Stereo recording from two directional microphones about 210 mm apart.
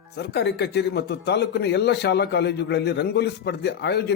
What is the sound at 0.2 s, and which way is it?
Speech, 50° left (ahead or behind).